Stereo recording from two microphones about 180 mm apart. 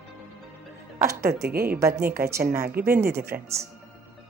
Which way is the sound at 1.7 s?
15° right (ahead or behind).